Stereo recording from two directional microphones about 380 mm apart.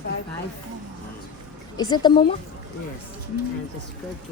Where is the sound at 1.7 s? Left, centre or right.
Centre.